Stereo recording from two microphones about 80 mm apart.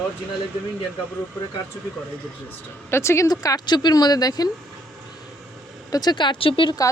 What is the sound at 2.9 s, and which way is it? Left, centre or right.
Speech, left.